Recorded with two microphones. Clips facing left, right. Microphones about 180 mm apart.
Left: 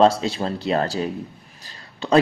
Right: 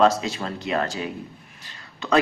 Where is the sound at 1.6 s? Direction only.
30° left (ahead or behind).